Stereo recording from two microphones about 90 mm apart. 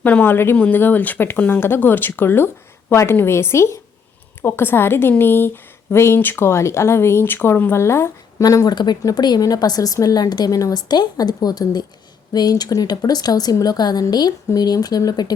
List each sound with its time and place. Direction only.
0.0 s speech: 20° left (ahead or behind)
8.4 s a woman's voice: 45° left (ahead or behind)